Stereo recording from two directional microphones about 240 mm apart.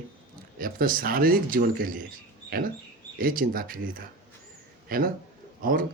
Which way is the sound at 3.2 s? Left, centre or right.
Right.